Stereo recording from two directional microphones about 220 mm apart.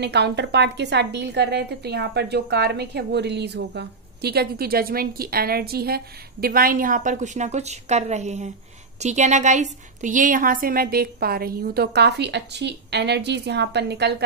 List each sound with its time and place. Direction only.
0.0 s a woman's voice: 50° right (ahead or behind)